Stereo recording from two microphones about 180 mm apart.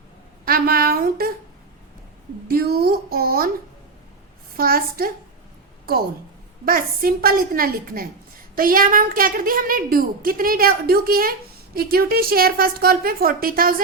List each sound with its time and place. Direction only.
0.4 s a sound: 55° right (ahead or behind)
2.5 s speech: 55° right (ahead or behind)
4.5 s a woman's voice: 55° right (ahead or behind)